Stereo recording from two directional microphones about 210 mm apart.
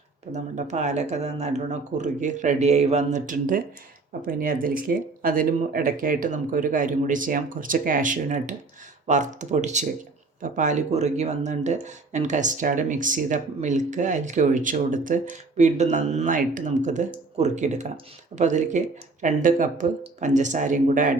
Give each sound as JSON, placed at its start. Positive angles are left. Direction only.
{"t": 0.3, "sound": "speech", "side_deg": -35}